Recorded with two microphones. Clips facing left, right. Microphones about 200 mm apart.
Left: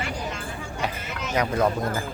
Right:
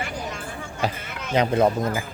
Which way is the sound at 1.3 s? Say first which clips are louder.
Right 4 dB; 25° right (ahead or behind).